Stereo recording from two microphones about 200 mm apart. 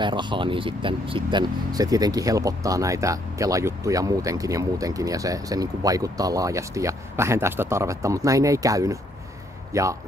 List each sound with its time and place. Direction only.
0.0 s speech: 25° right (ahead or behind)